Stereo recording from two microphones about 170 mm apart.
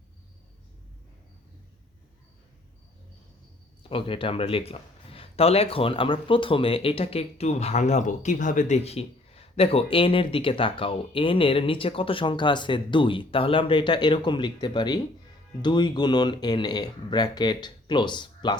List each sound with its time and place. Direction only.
3.8 s speech: 30° left (ahead or behind)